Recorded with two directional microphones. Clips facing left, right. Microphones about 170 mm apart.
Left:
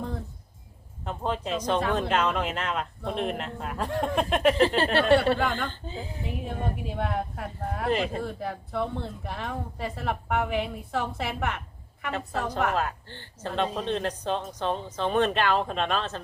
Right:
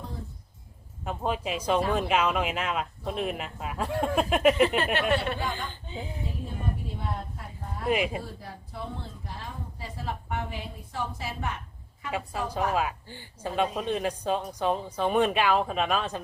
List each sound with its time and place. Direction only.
1.0 s a woman's voice: 5° right (ahead or behind)
4.6 s speech: 30° left (ahead or behind)
5.4 s speech: 60° left (ahead or behind)
6.2 s a woman's voice: 85° left
7.9 s a woman's voice: 10° right (ahead or behind)
8.2 s a woman's voice: 65° left (ahead or behind)
12.7 s a woman's voice: 10° right (ahead or behind)